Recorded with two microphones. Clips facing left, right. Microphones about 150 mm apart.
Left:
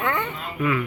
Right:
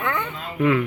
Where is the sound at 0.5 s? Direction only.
65° right (ahead or behind).